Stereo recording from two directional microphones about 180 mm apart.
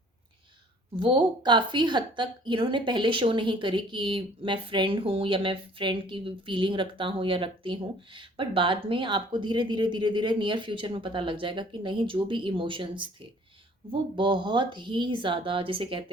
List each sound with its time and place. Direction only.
0.9 s a woman's voice: 25° right (ahead or behind)